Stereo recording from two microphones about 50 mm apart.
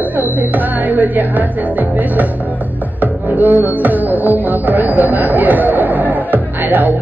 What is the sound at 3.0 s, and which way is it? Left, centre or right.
Music, right.